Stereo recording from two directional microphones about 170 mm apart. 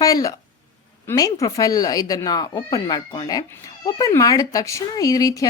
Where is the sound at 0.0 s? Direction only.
20° left (ahead or behind).